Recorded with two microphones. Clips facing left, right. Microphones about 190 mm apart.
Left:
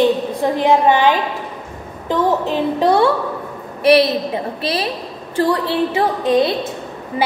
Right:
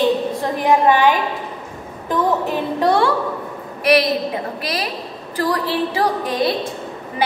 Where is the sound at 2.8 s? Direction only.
20° left (ahead or behind).